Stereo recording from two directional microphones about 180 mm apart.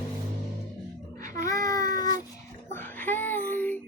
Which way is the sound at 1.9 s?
20° left (ahead or behind).